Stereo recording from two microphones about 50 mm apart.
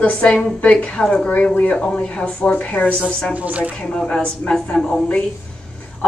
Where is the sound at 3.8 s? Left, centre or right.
Centre.